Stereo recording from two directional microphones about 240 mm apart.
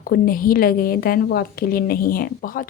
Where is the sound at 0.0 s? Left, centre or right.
Left.